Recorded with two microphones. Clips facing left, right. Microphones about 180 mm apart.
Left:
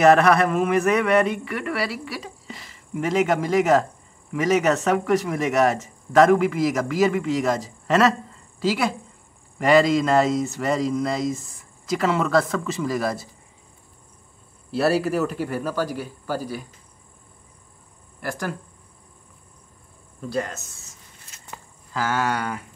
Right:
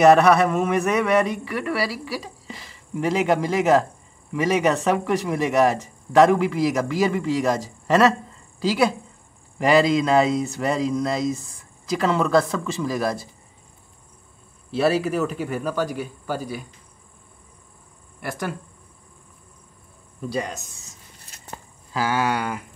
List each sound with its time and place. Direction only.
0.0 s speech: centre (ahead or behind)
9.6 s speech: centre (ahead or behind)
14.8 s speech: 5° left (ahead or behind)
20.2 s speech: 15° right (ahead or behind)
21.9 s speech: 10° right (ahead or behind)